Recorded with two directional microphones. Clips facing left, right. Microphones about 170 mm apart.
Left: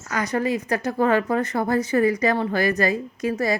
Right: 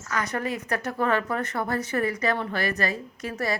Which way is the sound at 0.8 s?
35° left (ahead or behind).